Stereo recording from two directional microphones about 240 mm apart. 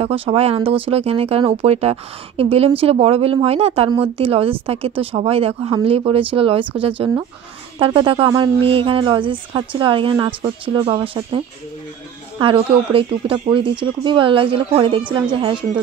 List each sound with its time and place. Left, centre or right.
0.0 s speech: right